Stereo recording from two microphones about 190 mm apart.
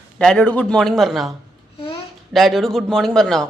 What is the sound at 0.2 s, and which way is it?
A man's voice, 5° left (ahead or behind).